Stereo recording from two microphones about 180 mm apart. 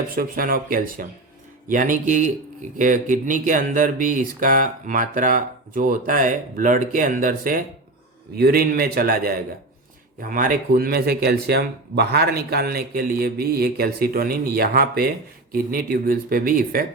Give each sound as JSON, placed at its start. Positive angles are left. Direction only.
{"t": 0.2, "sound": "speech", "side_deg": -55}